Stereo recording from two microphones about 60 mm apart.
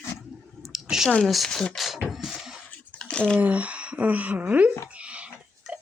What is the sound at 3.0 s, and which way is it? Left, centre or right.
Squish, centre.